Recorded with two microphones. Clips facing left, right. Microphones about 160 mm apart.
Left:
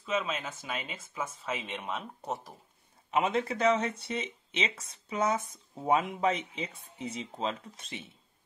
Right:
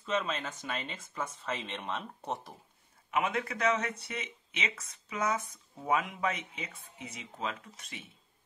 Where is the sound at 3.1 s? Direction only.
25° left (ahead or behind).